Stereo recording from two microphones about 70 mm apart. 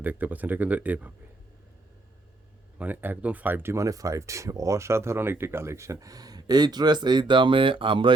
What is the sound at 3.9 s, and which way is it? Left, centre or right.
Speech, right.